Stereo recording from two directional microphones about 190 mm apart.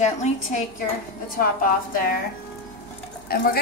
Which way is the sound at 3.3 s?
55° left (ahead or behind).